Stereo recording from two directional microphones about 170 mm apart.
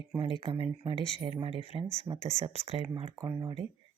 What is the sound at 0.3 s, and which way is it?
Speech, 30° right (ahead or behind).